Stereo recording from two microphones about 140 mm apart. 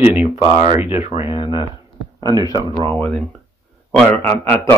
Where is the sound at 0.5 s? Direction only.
35° right (ahead or behind).